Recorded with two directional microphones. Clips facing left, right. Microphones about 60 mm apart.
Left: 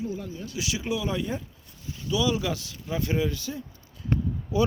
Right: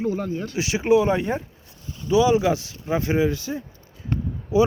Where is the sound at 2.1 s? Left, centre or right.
Right.